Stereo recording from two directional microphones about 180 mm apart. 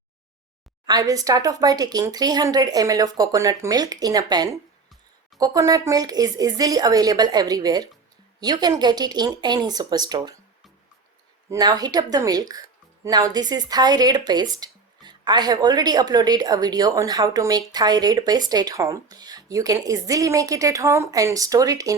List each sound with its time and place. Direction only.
0.9 s speech: 20° right (ahead or behind)
11.5 s speech: 20° right (ahead or behind)